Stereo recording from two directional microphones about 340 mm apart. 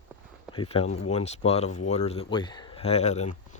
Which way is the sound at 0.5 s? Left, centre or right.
Centre.